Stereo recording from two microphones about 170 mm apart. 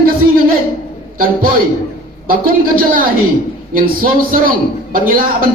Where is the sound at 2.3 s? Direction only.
55° right (ahead or behind).